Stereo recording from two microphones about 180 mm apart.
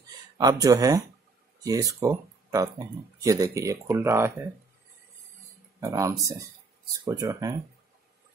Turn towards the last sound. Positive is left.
turn(degrees=-20)  # may be behind; listen again after turning